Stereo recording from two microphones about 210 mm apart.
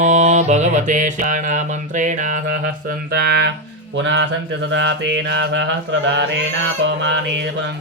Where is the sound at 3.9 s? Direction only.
60° right (ahead or behind).